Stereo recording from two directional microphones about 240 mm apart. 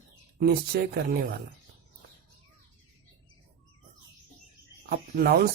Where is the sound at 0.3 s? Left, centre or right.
Right.